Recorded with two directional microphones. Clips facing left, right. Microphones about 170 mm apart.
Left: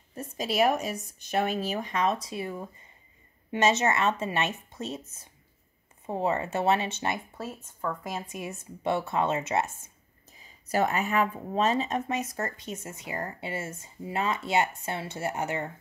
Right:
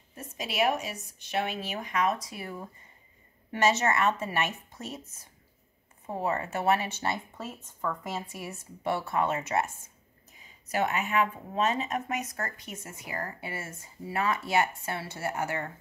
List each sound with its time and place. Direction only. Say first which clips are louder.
0.1 s speech: left 6 dB; 40° left (ahead or behind); by 9.7 s 25° left (ahead or behind)
10.4 s speech: left 3 dB; 35° left (ahead or behind); by 15.7 s 20° left (ahead or behind)